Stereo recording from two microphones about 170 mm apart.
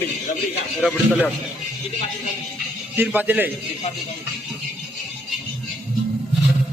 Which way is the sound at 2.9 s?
10° right (ahead or behind).